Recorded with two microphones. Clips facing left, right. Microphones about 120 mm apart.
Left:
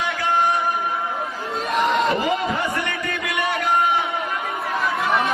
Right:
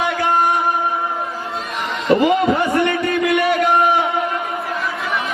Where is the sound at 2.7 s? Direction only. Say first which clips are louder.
Right 9 dB; 25° right (ahead or behind).